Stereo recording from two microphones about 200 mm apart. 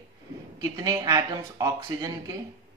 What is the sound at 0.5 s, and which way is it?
Speech, 15° right (ahead or behind).